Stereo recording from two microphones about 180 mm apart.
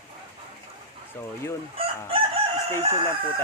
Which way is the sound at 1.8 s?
30° right (ahead or behind).